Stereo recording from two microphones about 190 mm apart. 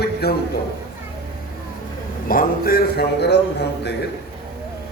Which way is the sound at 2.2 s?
50° left (ahead or behind).